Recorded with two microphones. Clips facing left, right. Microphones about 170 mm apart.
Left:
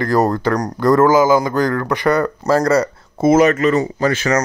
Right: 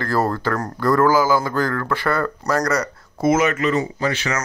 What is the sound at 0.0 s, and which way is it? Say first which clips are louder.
Speech: left 5 dB; 15° left (ahead or behind).